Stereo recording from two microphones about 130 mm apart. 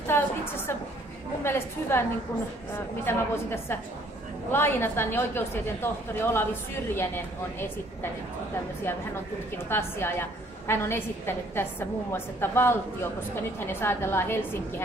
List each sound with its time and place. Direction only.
0.0 s a woman's voice: 15° left (ahead or behind)
3.1 s a woman's voice: 20° left (ahead or behind)
9.7 s a woman's voice: 15° left (ahead or behind)